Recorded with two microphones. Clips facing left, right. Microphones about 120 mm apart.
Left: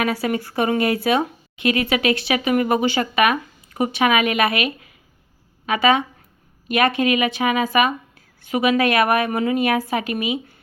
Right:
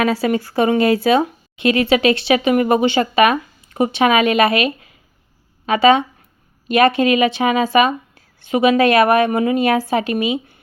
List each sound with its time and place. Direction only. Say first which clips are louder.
0.0 s speech: right 4 dB; 30° right (ahead or behind)